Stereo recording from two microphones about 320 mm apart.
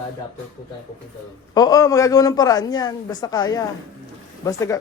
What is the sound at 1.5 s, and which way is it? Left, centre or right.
A man's voice, centre.